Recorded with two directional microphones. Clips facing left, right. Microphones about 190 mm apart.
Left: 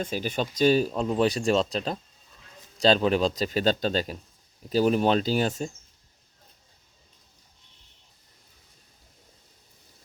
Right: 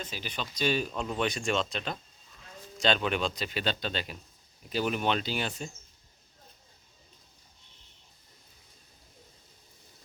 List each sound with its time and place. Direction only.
0.0 s speech: 45° left (ahead or behind)